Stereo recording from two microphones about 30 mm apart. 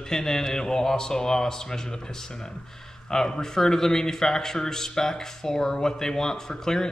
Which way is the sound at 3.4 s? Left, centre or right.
Centre.